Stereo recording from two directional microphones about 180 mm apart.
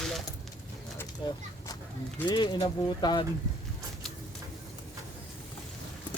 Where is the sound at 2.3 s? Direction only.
25° left (ahead or behind).